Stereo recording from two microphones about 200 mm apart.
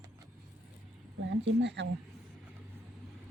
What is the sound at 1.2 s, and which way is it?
Speech, 65° right (ahead or behind).